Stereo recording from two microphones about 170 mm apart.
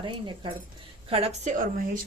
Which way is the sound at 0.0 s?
30° right (ahead or behind).